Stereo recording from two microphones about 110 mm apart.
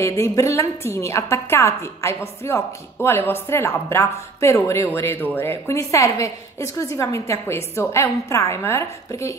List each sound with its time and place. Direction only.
0.0 s a woman's voice: 25° left (ahead or behind)